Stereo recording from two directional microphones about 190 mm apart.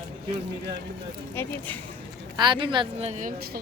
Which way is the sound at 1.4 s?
10° left (ahead or behind).